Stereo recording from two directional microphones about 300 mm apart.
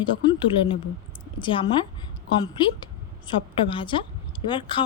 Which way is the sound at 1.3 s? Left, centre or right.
Centre.